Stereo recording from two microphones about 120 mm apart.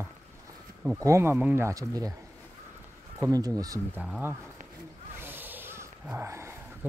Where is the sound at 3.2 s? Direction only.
30° right (ahead or behind).